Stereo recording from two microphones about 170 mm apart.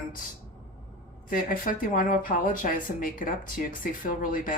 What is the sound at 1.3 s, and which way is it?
Speech, 55° left (ahead or behind).